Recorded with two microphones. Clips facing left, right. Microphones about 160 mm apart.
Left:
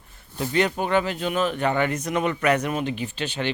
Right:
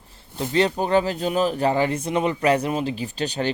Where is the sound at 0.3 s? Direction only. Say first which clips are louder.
Right 2 dB; 25° right (ahead or behind).